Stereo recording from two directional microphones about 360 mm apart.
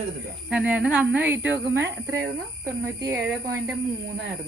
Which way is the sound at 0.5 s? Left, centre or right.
Centre.